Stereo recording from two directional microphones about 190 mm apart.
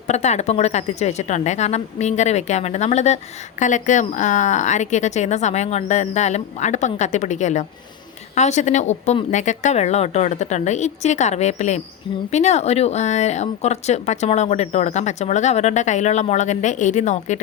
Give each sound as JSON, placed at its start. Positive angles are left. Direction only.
{"t": 0.1, "sound": "speech", "side_deg": 35}